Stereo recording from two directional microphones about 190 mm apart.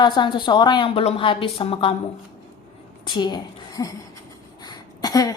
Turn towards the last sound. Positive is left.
turn(degrees=20)  # may be behind; listen again after turning